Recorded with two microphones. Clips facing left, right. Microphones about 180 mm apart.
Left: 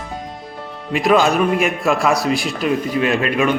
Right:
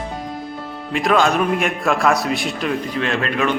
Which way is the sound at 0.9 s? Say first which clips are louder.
Left 2 dB; 5° left (ahead or behind).